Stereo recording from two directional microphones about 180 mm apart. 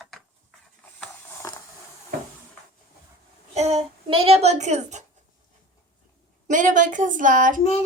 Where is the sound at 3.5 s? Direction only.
35° right (ahead or behind).